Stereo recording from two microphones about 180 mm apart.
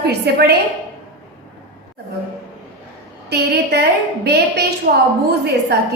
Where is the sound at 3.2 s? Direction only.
65° right (ahead or behind).